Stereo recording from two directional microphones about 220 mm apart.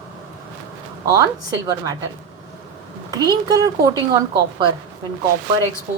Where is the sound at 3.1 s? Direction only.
20° right (ahead or behind).